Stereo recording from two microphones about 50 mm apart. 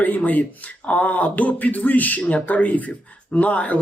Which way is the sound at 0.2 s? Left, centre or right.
Left.